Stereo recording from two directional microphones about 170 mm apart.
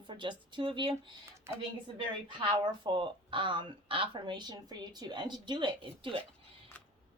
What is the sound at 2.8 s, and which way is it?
Speech, 30° right (ahead or behind).